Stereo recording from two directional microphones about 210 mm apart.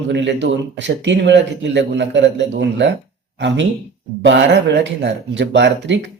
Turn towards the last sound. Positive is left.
turn(degrees=-55)  # may be behind; listen again after turning